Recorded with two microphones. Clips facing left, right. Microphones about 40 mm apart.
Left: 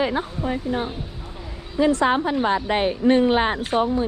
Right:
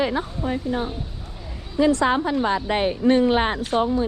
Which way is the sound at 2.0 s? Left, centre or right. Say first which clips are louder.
Left 1 dB; left.